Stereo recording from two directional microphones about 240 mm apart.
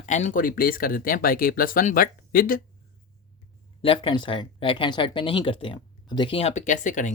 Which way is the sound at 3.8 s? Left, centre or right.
Left.